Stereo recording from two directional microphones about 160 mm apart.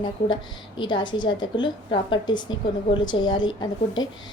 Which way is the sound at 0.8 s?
30° left (ahead or behind).